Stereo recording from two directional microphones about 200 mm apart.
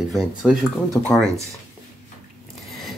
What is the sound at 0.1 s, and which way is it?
Speech, 5° right (ahead or behind).